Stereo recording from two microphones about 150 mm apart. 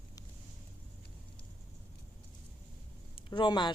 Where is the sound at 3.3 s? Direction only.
30° left (ahead or behind).